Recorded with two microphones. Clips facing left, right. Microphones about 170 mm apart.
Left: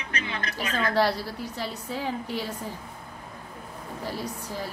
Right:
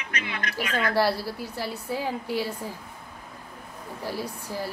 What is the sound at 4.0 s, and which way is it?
Speech, 10° right (ahead or behind).